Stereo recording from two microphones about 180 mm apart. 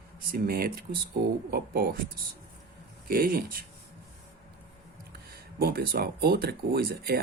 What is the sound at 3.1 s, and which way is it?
Speech, 55° right (ahead or behind).